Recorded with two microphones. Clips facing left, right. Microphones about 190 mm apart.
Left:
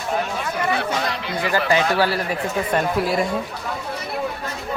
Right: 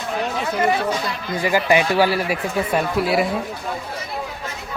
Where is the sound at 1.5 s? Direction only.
15° right (ahead or behind).